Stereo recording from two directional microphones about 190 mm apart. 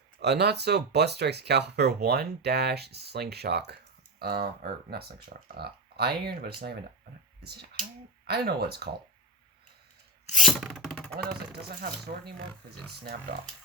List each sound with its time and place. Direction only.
0.2 s speech: 60° right (ahead or behind)
10.3 s speech: centre (ahead or behind)
11.2 s speech: 55° right (ahead or behind)